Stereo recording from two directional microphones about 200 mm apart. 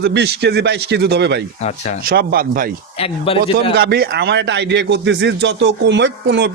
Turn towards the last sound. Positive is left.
turn(degrees=-60)  # may be behind; listen again after turning